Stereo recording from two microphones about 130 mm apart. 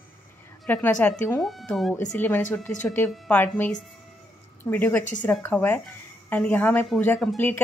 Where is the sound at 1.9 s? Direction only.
15° left (ahead or behind).